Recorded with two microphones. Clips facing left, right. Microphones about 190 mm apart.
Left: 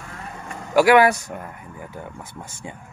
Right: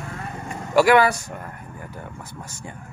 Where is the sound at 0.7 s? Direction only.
10° left (ahead or behind).